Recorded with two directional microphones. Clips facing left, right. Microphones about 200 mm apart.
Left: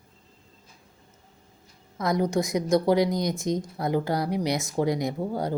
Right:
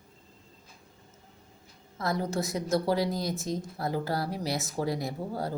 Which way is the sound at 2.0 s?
15° left (ahead or behind).